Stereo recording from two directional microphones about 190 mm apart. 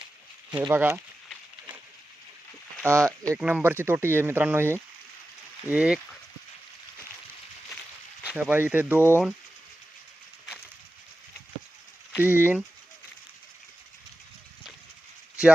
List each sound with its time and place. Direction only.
0.5 s speech: 10° right (ahead or behind)
2.8 s speech: 15° right (ahead or behind)
8.2 s speech: 5° right (ahead or behind)
9.0 s speech: 10° left (ahead or behind)
12.2 s speech: 10° right (ahead or behind)